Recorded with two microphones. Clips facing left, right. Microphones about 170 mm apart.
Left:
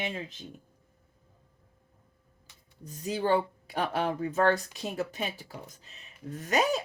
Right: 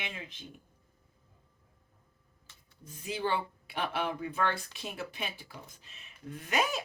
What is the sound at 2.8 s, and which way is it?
Speech, 40° left (ahead or behind).